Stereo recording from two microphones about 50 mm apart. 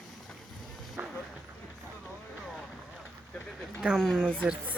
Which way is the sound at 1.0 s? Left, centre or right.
Right.